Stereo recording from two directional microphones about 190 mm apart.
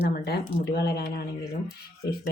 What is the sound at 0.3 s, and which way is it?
Speech, 55° left (ahead or behind).